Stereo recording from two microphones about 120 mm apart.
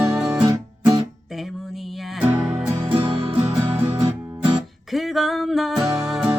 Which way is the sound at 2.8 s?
45° right (ahead or behind).